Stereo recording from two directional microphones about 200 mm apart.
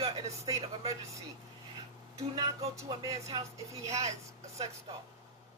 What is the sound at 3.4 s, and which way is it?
Speech, 30° right (ahead or behind).